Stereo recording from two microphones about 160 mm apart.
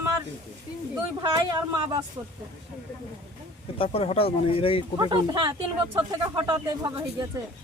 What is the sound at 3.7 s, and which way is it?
Speech, 35° left (ahead or behind).